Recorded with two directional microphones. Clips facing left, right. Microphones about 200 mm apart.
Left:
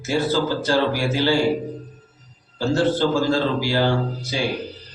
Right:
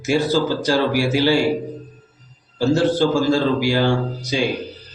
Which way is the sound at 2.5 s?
15° right (ahead or behind).